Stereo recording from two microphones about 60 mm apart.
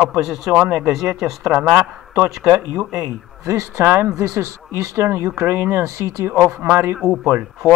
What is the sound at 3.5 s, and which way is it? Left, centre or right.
Speech, right.